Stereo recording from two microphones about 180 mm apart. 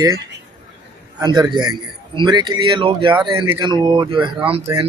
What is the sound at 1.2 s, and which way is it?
A man's voice, 20° right (ahead or behind).